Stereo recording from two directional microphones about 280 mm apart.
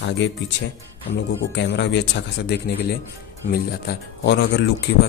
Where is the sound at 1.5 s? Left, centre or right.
Left.